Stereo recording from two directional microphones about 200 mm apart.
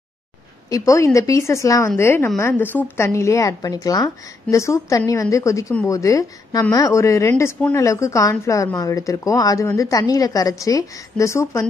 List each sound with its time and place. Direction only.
0.7 s a woman's voice: 15° left (ahead or behind)